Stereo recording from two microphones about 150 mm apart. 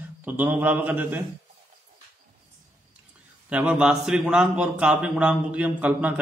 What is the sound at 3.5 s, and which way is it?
A man's voice, 5° right (ahead or behind).